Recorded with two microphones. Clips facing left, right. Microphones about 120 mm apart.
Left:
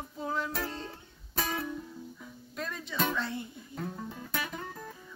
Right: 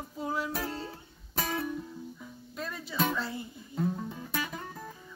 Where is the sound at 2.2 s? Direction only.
Centre (ahead or behind).